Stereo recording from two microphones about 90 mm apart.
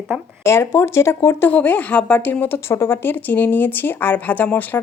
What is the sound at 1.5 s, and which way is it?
A woman's voice, 15° left (ahead or behind).